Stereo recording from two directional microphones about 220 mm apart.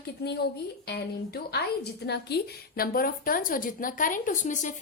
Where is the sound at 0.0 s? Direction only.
50° left (ahead or behind).